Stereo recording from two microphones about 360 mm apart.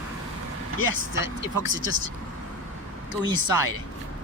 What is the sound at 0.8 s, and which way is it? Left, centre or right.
Speech, left.